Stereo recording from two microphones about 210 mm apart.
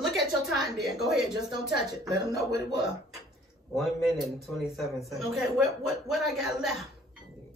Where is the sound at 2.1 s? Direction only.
15° right (ahead or behind).